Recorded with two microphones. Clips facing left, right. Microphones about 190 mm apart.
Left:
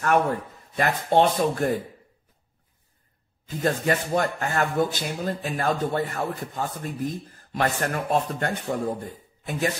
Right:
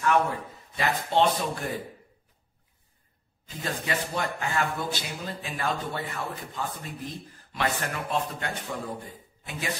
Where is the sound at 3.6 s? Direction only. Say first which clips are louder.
Left 7 dB; 45° left (ahead or behind).